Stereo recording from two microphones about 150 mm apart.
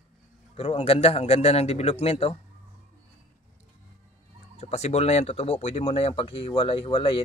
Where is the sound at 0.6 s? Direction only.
40° left (ahead or behind).